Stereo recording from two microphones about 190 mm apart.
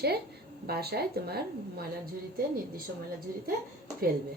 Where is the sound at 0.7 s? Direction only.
55° right (ahead or behind).